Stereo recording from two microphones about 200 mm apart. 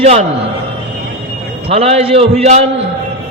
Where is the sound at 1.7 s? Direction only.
30° right (ahead or behind).